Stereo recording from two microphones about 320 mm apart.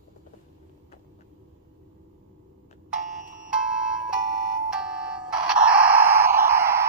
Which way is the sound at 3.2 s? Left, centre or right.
Right.